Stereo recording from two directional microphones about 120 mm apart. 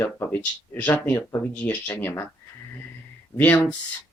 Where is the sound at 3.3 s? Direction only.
15° left (ahead or behind).